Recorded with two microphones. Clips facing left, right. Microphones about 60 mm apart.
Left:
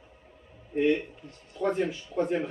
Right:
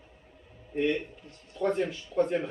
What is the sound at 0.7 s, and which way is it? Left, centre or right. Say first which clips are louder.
Speech: left 3 dB; centre.